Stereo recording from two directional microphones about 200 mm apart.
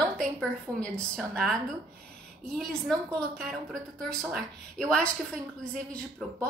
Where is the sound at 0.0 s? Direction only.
5° left (ahead or behind).